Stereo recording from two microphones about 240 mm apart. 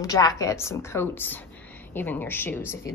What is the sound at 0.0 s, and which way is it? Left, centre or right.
A woman's voice, centre.